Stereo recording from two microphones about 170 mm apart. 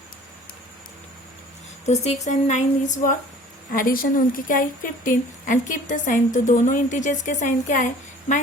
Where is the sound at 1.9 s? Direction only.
40° left (ahead or behind).